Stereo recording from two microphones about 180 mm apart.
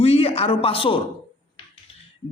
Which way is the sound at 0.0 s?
35° left (ahead or behind).